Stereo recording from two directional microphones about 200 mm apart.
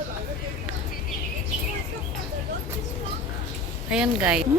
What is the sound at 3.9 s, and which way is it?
Speech, 5° right (ahead or behind).